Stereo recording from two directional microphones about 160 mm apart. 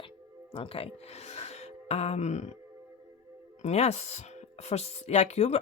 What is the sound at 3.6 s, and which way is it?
Speech, 45° left (ahead or behind).